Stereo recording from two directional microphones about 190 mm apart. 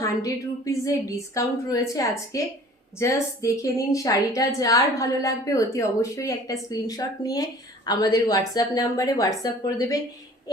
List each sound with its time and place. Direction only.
0.0 s a woman's voice: 15° left (ahead or behind)